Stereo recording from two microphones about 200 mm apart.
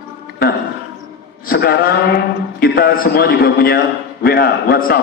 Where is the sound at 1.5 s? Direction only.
50° left (ahead or behind).